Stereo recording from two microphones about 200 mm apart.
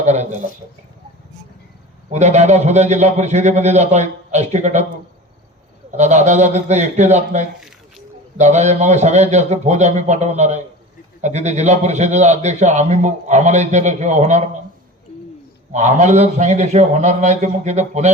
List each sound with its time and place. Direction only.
0.0 s a man's voice: 35° right (ahead or behind)
2.0 s a man's voice: 35° right (ahead or behind)
6.0 s a man's voice: 35° right (ahead or behind)
15.7 s a man's voice: 35° right (ahead or behind)